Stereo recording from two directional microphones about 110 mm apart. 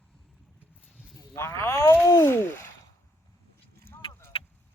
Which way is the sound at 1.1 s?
25° left (ahead or behind).